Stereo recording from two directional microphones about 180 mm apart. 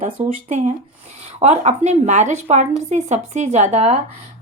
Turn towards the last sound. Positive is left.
turn(degrees=-40)  # may be behind; listen again after turning